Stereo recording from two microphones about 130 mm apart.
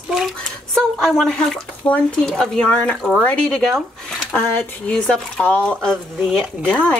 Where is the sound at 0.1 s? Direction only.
5° left (ahead or behind).